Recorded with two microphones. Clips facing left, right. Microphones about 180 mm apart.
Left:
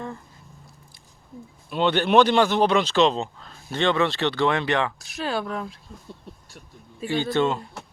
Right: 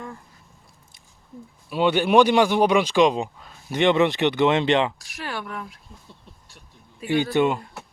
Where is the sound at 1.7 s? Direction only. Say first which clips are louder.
Right 1 dB; 10° right (ahead or behind).